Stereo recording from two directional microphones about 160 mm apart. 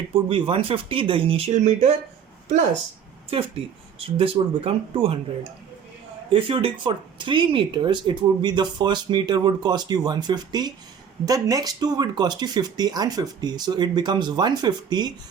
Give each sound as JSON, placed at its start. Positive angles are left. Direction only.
{"t": 0.1, "sound": "speech", "side_deg": -35}
{"t": 3.2, "sound": "speech", "side_deg": -35}